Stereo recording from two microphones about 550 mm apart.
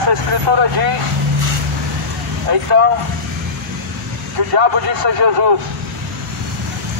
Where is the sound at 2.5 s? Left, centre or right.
Right.